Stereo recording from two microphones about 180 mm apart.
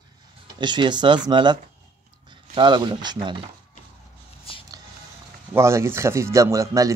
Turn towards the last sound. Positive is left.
turn(degrees=-20)  # may be behind; listen again after turning